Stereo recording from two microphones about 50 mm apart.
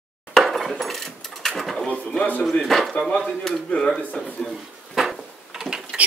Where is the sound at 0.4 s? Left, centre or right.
Centre.